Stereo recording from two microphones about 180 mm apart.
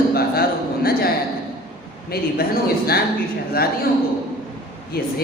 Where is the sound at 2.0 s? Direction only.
60° left (ahead or behind).